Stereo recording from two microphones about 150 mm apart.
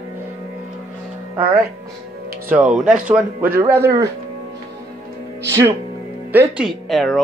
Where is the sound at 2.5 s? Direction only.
5° right (ahead or behind).